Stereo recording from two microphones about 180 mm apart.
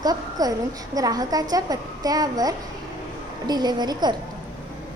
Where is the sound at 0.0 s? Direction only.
20° right (ahead or behind).